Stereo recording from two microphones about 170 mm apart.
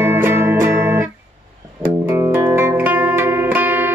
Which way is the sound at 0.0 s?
10° right (ahead or behind).